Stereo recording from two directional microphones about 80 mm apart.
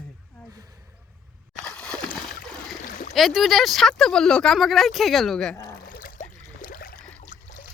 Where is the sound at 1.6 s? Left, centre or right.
Centre.